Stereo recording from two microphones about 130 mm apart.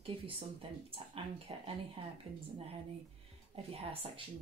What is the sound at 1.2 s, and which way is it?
Speech, 45° right (ahead or behind).